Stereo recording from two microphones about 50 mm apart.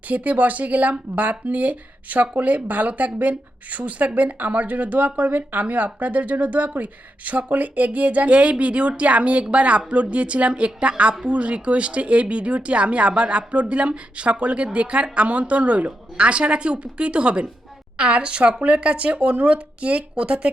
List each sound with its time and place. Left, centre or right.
0.1 s speech: right